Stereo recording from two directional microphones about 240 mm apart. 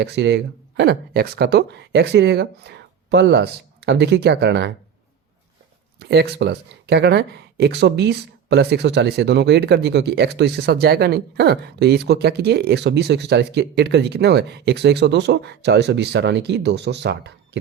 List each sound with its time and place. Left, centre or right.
0.0 s speech: right
6.1 s speech: right